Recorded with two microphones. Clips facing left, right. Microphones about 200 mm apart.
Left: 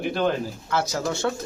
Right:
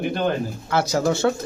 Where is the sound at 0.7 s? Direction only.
65° right (ahead or behind).